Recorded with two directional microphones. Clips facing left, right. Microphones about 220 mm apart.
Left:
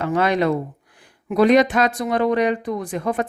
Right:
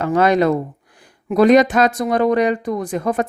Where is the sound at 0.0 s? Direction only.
40° right (ahead or behind).